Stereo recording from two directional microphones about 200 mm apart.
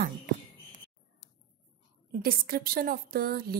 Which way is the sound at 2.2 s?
50° right (ahead or behind).